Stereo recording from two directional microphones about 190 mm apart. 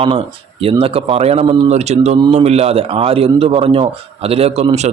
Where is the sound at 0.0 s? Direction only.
30° right (ahead or behind).